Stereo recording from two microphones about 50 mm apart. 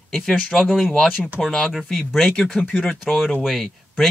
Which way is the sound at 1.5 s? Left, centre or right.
Centre.